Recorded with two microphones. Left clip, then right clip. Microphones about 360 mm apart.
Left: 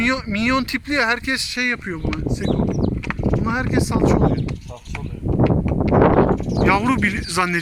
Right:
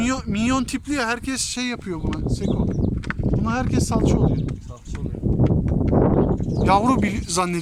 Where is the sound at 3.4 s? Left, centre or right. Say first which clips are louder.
Left 1 dB; centre.